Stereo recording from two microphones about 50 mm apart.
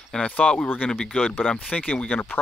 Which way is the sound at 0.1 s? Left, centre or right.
Centre.